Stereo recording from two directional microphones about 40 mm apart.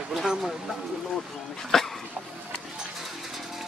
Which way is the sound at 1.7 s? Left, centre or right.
Centre.